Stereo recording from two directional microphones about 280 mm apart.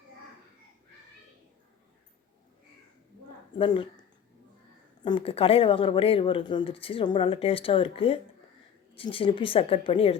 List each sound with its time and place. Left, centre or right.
3.6 s speech: centre
5.0 s speech: centre